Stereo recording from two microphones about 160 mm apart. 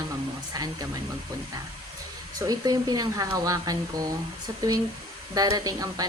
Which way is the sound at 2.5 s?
25° right (ahead or behind).